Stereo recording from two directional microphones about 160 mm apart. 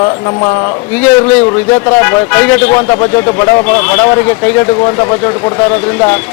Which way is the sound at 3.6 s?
10° left (ahead or behind).